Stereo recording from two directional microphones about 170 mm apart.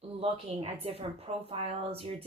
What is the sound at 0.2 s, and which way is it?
Speech, 35° right (ahead or behind).